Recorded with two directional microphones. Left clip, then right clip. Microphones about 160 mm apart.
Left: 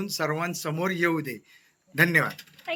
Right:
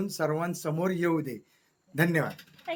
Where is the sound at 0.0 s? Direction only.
30° right (ahead or behind).